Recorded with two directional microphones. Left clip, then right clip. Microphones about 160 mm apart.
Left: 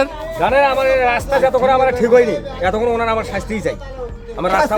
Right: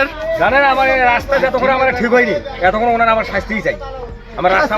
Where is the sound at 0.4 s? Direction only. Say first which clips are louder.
Right 1 dB; 50° left (ahead or behind).